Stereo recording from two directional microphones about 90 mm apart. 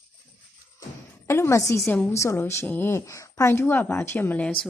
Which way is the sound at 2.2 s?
30° left (ahead or behind).